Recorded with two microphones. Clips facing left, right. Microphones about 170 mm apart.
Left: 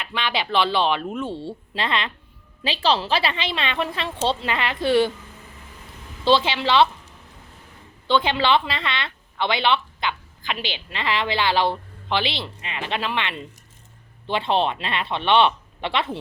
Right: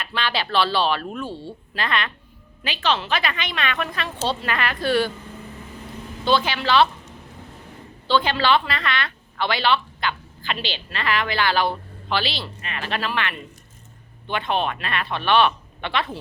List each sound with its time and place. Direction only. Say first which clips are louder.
0.0 s a woman's voice: even; 15° left (ahead or behind)
6.2 s a woman's voice: left 2 dB; 25° left (ahead or behind)
8.0 s a woman's voice: even; 20° left (ahead or behind)